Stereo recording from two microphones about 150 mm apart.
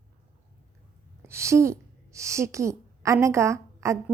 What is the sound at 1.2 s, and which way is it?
A woman's voice, 20° right (ahead or behind).